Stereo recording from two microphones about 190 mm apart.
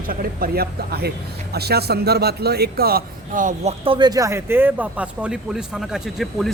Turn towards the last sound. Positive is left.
turn(degrees=0)  # may be behind; listen again after turning